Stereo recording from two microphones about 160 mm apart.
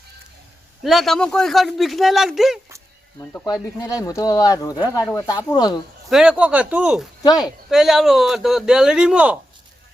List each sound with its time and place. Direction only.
0.9 s speech: centre (ahead or behind)
3.4 s speech: 25° left (ahead or behind)
6.1 s speech: 5° right (ahead or behind)
7.2 s speech: 25° left (ahead or behind)
7.7 s speech: centre (ahead or behind)